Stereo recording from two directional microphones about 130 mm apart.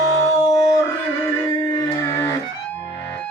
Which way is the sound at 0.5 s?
25° left (ahead or behind).